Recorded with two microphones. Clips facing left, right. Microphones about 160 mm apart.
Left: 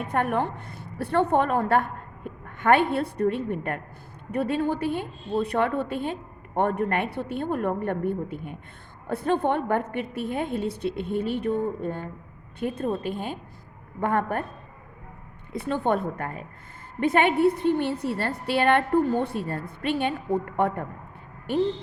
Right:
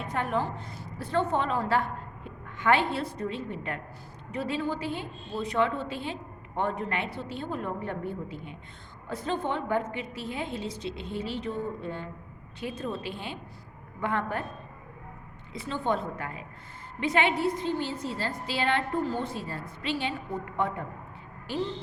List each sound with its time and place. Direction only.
0.0 s a woman's voice: 60° left (ahead or behind)
15.5 s a woman's voice: 60° left (ahead or behind)